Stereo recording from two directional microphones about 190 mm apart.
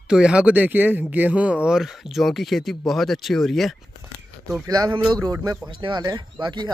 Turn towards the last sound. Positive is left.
turn(degrees=-25)  # may be behind; listen again after turning